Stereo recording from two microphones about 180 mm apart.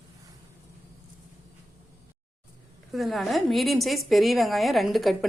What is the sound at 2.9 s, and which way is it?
A woman's voice, centre (ahead or behind).